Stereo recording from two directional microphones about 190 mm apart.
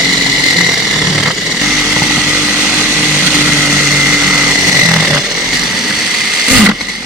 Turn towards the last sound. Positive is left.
turn(degrees=-5)  # may be behind; listen again after turning